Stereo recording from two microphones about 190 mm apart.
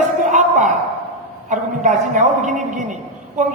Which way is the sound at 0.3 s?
40° right (ahead or behind).